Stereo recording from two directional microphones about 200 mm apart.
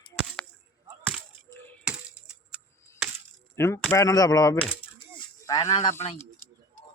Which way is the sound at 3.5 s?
10° left (ahead or behind).